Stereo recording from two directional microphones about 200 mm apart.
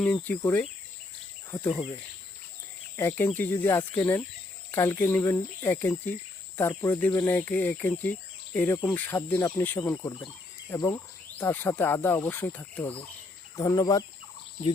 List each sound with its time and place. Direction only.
0.0 s speech: 10° left (ahead or behind)
1.5 s insect: 15° left (ahead or behind)
2.9 s speech: 10° left (ahead or behind)